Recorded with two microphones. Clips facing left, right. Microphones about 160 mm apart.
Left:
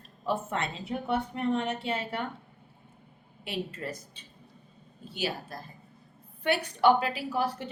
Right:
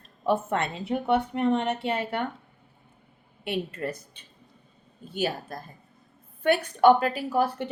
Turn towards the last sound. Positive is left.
turn(degrees=-55)  # may be behind; listen again after turning